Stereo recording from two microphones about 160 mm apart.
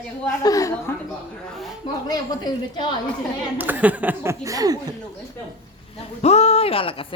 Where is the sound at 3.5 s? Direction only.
10° right (ahead or behind).